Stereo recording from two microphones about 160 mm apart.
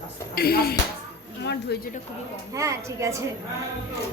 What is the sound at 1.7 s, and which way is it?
Speech, 90° left.